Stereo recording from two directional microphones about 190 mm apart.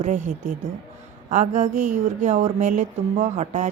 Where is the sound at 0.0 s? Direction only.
40° right (ahead or behind).